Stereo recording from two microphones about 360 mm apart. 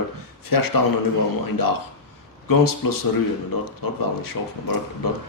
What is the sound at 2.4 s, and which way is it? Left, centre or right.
Speech, left.